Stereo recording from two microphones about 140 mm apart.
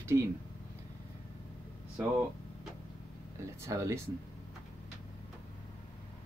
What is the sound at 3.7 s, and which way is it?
Speech, 20° right (ahead or behind).